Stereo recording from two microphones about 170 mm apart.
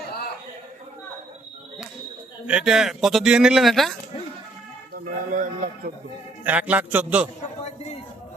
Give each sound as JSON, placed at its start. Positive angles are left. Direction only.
{"t": 2.5, "sound": "a man's voice", "side_deg": -5}
{"t": 5.3, "sound": "a man's voice", "side_deg": -50}
{"t": 6.4, "sound": "a man's voice", "side_deg": -10}